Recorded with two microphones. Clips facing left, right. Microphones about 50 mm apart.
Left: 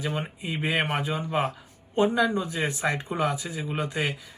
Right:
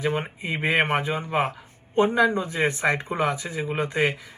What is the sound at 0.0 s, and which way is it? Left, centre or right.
Speech, right.